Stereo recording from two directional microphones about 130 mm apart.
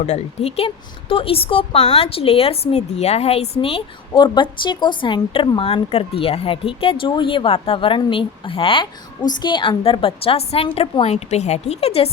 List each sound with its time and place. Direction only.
0.0 s a woman's voice: 50° left (ahead or behind)